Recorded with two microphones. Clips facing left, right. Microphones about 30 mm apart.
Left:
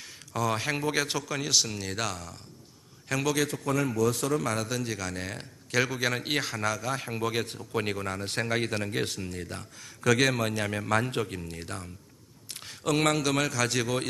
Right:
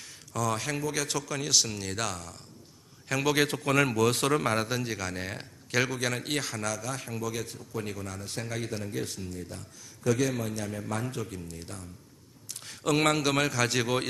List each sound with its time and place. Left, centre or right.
0.3 s speech: left
0.8 s a man's voice: left
1.0 s a man's voice: centre
3.5 s a man's voice: right
4.4 s a man's voice: right
4.8 s a man's voice: centre
6.0 s speech: centre
7.2 s speech: left
10.0 s a man's voice: left
10.5 s speech: left
11.0 s speech: left
12.6 s a man's voice: centre